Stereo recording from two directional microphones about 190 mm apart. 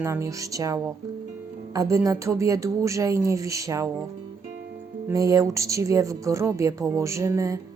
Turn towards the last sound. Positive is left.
turn(degrees=-15)  # may be behind; listen again after turning